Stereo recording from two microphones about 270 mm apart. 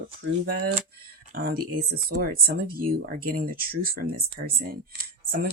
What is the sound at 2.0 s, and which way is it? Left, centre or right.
Speech, right.